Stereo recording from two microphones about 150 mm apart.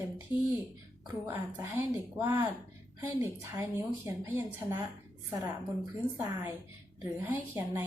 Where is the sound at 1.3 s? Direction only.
10° right (ahead or behind).